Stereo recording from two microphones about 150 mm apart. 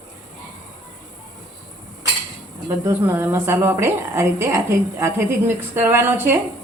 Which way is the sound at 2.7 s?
15° right (ahead or behind).